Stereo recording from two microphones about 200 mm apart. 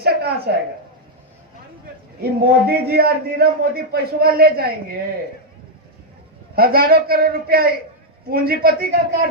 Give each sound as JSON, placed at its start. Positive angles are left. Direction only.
{"t": 0.0, "sound": "a sound", "side_deg": -50}
{"t": 2.4, "sound": "a man's voice", "side_deg": -50}
{"t": 6.6, "sound": "a man's voice", "side_deg": -50}